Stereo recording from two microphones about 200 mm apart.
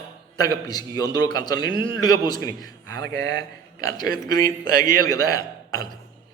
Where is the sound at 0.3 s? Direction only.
20° left (ahead or behind).